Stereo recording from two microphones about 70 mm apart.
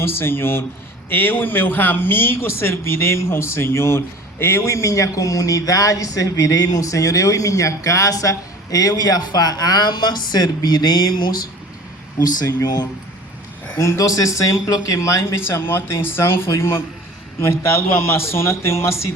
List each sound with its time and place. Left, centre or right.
0.0 s a man's voice: left
12.2 s speech: left
13.7 s speech: left